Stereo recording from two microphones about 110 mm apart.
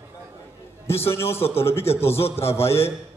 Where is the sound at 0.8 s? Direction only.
25° left (ahead or behind).